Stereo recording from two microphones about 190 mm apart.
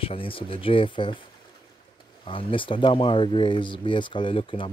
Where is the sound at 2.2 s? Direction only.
25° left (ahead or behind).